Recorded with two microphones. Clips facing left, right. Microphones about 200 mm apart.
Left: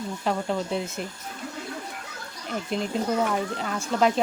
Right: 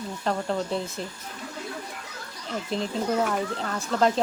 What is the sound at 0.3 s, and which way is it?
Speech, 5° left (ahead or behind).